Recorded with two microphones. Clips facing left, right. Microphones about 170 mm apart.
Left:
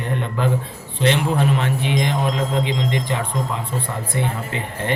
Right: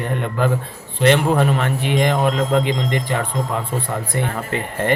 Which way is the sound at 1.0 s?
55° right (ahead or behind).